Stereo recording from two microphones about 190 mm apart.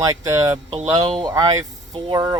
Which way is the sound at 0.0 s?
15° right (ahead or behind).